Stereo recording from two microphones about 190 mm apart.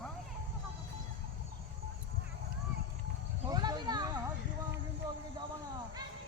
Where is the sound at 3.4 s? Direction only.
20° right (ahead or behind).